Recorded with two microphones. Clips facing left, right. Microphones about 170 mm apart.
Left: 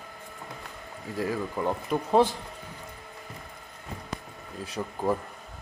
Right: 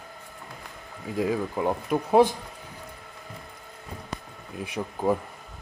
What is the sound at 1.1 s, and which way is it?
Speech, 15° right (ahead or behind).